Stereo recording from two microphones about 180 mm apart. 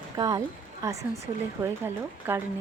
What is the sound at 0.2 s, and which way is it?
A woman's voice, 20° right (ahead or behind).